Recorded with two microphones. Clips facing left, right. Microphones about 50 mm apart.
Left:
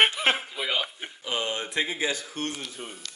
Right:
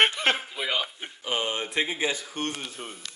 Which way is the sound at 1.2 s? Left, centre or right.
Right.